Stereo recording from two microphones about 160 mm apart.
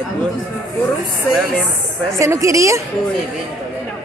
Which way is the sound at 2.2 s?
20° right (ahead or behind).